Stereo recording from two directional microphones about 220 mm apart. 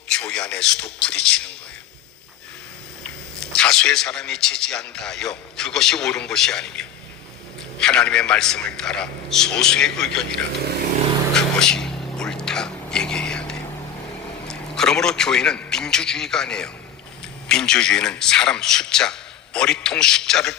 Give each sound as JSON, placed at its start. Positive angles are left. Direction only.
{"t": 0.2, "sound": "a man's voice", "side_deg": 5}
{"t": 3.4, "sound": "a man's voice", "side_deg": 5}
{"t": 11.3, "sound": "whispering", "side_deg": 5}
{"t": 14.4, "sound": "a man's voice", "side_deg": 5}